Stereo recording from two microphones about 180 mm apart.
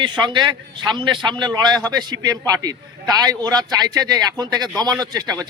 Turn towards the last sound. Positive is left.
turn(degrees=-20)  # may be behind; listen again after turning